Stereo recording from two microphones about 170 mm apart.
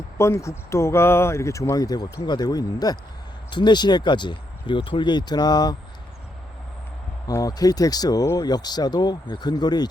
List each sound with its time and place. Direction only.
0.2 s speech: 15° left (ahead or behind)
7.3 s speech: 20° left (ahead or behind)